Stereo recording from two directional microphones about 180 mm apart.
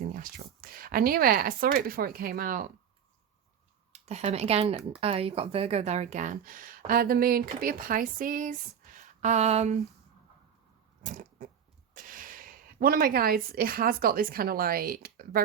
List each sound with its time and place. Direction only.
0.1 s speech: 55° right (ahead or behind)
3.9 s speech: 35° right (ahead or behind)
11.0 s cat: 45° right (ahead or behind)
11.9 s speech: 50° right (ahead or behind)